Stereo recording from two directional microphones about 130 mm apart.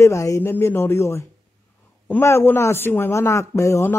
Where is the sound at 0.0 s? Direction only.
25° left (ahead or behind).